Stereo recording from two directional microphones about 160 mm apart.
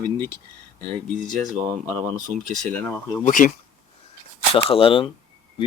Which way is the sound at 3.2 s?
55° left (ahead or behind).